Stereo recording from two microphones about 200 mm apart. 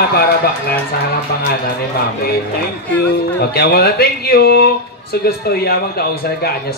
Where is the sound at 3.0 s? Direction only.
50° left (ahead or behind).